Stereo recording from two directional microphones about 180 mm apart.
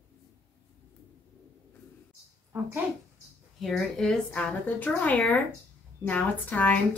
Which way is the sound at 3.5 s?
Centre (ahead or behind).